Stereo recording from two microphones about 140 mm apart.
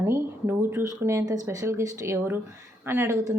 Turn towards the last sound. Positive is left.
turn(degrees=-20)  # may be behind; listen again after turning